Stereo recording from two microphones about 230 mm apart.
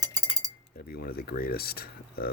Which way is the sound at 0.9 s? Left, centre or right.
Left.